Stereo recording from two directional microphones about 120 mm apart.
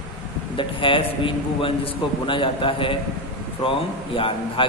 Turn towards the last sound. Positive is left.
turn(degrees=45)  # may be behind; listen again after turning